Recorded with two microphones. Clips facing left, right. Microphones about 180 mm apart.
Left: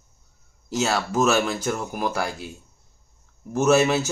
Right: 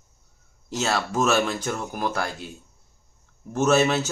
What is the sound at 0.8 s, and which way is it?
Speech, 5° left (ahead or behind).